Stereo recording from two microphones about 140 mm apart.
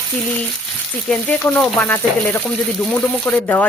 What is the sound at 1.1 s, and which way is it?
Speech, 10° left (ahead or behind).